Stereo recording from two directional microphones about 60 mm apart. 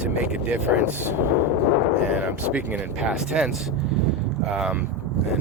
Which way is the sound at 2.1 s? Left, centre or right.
Right.